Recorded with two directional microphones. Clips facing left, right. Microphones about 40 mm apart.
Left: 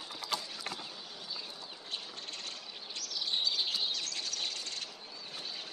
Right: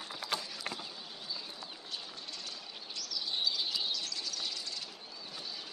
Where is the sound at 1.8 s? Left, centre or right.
Left.